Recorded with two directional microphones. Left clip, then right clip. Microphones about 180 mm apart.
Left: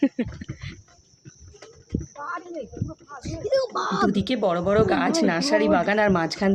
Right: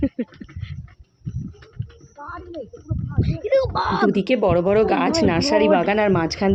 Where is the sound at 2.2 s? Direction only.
20° right (ahead or behind).